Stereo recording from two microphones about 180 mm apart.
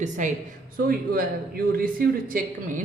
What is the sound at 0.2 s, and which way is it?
Speech, 45° right (ahead or behind).